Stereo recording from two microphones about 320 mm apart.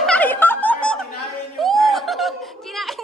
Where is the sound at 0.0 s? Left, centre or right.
Centre.